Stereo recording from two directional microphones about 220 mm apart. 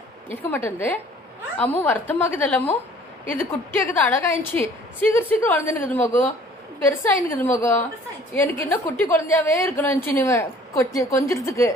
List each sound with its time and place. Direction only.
0.3 s a woman's voice: 10° left (ahead or behind)